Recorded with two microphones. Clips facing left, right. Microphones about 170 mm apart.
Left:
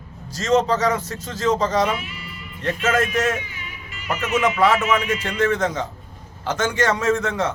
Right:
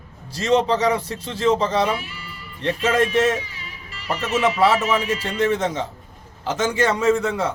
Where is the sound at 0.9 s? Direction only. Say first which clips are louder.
Right 1 dB; 35° right (ahead or behind).